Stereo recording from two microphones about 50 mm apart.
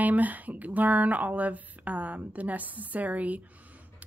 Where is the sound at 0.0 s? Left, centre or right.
Right.